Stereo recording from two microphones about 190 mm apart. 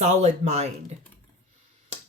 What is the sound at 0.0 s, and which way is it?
Speech, 35° right (ahead or behind).